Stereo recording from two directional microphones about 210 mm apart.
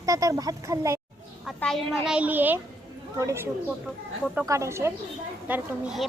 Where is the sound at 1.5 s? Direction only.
5° left (ahead or behind).